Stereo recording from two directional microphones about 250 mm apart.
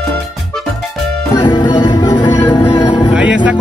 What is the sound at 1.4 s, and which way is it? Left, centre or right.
Music, centre.